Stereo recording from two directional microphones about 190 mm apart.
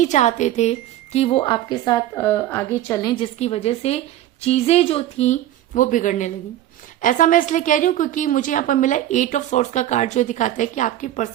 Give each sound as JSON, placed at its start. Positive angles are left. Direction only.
{"t": 0.0, "sound": "a woman's voice", "side_deg": 40}
{"t": 3.3, "sound": "a woman's voice", "side_deg": 35}